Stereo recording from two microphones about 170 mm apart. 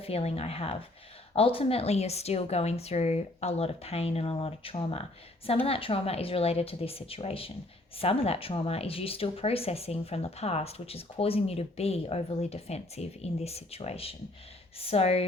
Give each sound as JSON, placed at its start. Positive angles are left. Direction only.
{"t": 0.0, "sound": "speech", "side_deg": 35}